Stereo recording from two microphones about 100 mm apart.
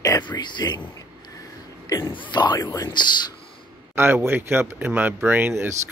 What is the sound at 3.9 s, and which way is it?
Speech, 20° right (ahead or behind).